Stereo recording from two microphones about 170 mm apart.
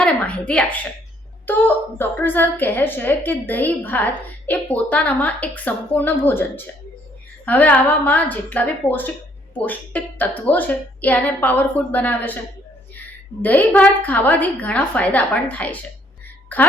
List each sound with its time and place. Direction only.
0.0 s a sound: 5° left (ahead or behind)
1.5 s a woman's voice: 10° left (ahead or behind)
13.4 s a woman's voice: 10° left (ahead or behind)